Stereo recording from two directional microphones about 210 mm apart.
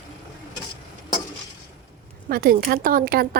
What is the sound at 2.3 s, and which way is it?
Speech, 45° right (ahead or behind).